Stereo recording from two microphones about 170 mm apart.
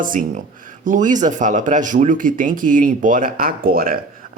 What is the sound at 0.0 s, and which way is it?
Speech, 50° right (ahead or behind).